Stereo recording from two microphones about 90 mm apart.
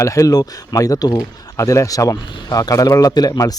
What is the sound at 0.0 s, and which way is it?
A man's voice, 35° left (ahead or behind).